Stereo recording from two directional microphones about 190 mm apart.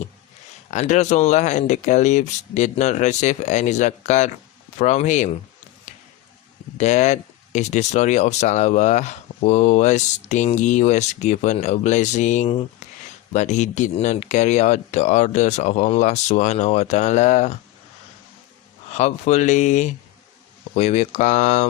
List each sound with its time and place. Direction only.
0.7 s speech: 40° left (ahead or behind)
6.7 s speech: 40° left (ahead or behind)
18.9 s speech: 35° left (ahead or behind)